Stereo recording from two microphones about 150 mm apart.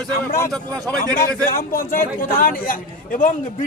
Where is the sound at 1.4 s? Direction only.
75° left (ahead or behind).